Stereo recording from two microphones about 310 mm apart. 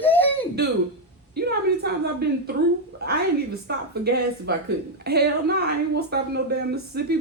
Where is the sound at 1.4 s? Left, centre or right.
Right.